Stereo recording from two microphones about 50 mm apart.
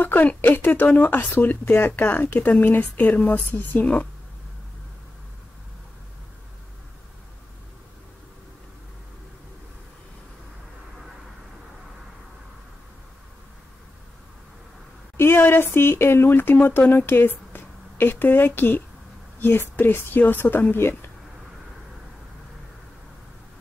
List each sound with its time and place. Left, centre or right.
0.0 s a woman's voice: left
1.6 s a woman's voice: left
15.1 s a woman's voice: left